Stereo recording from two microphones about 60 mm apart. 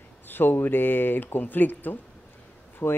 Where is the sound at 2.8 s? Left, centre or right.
Left.